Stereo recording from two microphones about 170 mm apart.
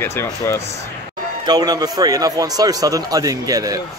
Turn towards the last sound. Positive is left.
turn(degrees=-20)  # may be behind; listen again after turning